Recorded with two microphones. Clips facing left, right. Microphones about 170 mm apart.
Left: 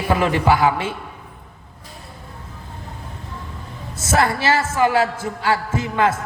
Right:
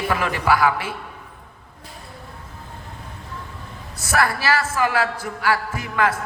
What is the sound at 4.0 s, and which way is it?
A man's voice, 25° left (ahead or behind).